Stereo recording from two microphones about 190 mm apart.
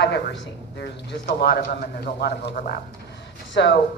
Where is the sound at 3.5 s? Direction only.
65° left (ahead or behind).